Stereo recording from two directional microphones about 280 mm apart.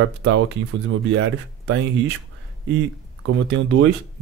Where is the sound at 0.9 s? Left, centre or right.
Right.